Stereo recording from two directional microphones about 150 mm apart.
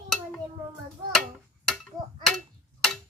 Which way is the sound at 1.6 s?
5° left (ahead or behind).